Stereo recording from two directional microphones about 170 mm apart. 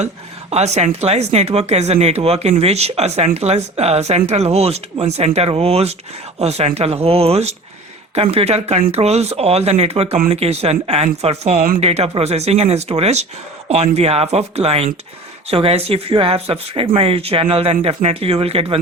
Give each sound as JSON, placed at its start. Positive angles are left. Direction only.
{"t": 0.5, "sound": "speech", "side_deg": -40}